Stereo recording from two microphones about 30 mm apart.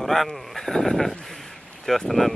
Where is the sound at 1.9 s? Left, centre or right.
Centre.